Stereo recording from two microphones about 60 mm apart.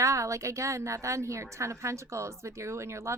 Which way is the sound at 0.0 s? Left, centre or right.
Right.